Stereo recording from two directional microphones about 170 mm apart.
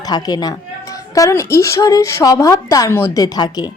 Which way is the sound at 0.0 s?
25° left (ahead or behind).